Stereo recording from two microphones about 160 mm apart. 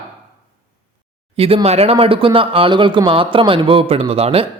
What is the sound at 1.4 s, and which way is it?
Speech, 35° right (ahead or behind).